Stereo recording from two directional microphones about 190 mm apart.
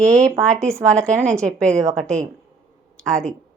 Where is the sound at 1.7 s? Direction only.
15° right (ahead or behind).